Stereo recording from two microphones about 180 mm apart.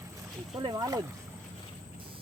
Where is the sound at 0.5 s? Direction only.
20° right (ahead or behind).